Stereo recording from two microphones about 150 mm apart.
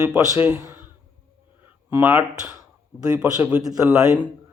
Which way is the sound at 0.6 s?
20° right (ahead or behind).